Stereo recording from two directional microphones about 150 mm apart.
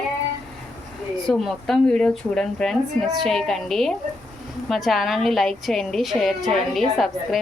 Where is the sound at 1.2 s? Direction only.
Centre (ahead or behind).